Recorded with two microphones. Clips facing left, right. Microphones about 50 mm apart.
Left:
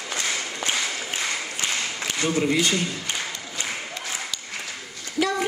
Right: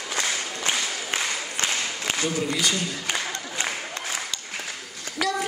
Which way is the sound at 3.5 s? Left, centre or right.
Right.